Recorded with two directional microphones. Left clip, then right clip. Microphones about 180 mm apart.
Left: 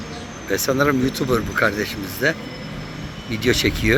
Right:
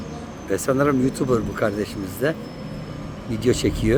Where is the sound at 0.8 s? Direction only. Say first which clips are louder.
Left 1 dB; 20° right (ahead or behind).